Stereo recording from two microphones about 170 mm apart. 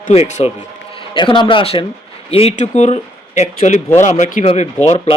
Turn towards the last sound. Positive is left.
turn(degrees=40)  # may be behind; listen again after turning